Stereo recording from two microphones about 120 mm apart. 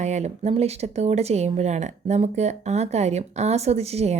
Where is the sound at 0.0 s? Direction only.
70° right (ahead or behind).